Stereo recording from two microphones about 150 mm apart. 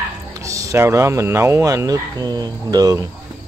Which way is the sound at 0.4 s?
20° right (ahead or behind).